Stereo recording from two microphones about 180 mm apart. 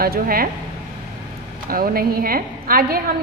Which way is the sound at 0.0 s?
55° right (ahead or behind).